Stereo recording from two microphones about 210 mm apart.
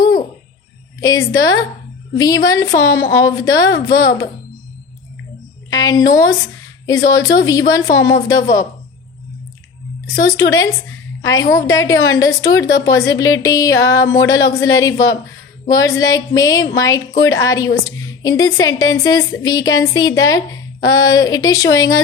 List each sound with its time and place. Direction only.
0.0 s a sound: 20° left (ahead or behind)
1.0 s a woman's voice: 15° left (ahead or behind)
5.8 s a woman's voice: 15° left (ahead or behind)
10.1 s a woman's voice: 15° left (ahead or behind)